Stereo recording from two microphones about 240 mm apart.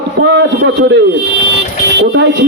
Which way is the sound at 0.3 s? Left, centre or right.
Right.